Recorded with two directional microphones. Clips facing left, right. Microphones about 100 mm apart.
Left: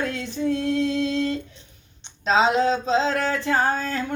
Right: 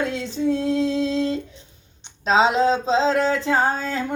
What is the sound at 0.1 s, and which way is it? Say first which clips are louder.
Female singing: right 2 dB; 30° right (ahead or behind).